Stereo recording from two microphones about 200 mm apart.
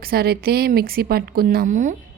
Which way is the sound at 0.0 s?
50° right (ahead or behind).